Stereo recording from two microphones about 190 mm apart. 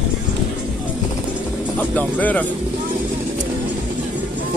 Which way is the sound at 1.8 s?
10° left (ahead or behind).